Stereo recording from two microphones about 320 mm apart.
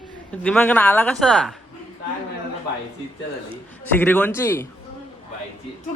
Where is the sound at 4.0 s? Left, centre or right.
Centre.